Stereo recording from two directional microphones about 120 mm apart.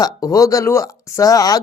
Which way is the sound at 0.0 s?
30° left (ahead or behind).